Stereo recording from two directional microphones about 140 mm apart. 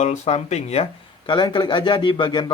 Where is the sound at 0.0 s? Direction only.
50° left (ahead or behind).